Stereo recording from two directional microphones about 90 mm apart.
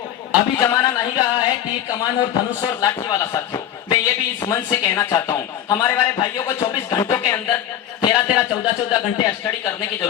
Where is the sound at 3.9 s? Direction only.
45° left (ahead or behind).